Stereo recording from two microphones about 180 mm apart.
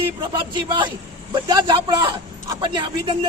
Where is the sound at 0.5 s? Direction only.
25° right (ahead or behind).